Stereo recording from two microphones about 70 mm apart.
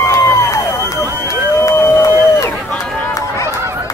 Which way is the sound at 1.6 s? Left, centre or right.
Left.